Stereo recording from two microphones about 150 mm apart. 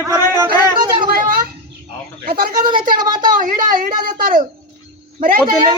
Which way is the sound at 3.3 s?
65° right (ahead or behind).